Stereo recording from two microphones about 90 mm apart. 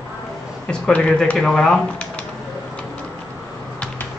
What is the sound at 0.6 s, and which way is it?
Speech, 10° left (ahead or behind).